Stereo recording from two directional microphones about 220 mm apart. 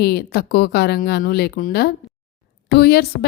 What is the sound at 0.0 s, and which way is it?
A woman's voice, 45° left (ahead or behind).